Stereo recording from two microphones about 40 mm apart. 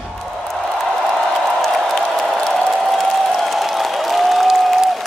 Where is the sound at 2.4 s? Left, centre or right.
Centre.